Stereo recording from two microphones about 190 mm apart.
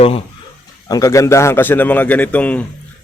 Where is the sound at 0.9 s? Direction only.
20° left (ahead or behind).